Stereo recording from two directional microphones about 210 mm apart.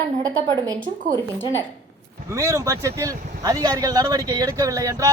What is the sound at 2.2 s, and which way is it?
A man's voice, 15° right (ahead or behind).